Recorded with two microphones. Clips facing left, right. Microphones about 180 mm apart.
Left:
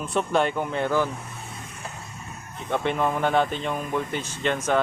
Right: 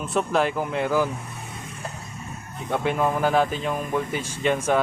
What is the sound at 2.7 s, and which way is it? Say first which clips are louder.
Speech: right 1 dB; 5° right (ahead or behind).